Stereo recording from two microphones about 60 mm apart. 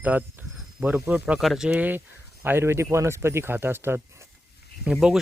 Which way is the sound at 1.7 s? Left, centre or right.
Right.